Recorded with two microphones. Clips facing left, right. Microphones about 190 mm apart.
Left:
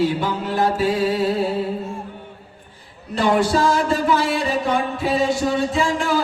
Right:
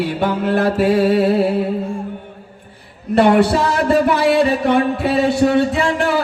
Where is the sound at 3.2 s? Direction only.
65° right (ahead or behind).